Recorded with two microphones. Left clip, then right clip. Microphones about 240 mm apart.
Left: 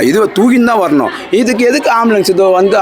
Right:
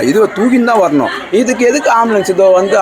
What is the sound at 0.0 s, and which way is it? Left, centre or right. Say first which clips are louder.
Speech: left 1 dB; left.